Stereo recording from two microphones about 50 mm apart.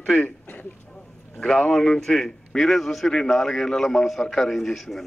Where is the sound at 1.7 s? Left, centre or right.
Centre.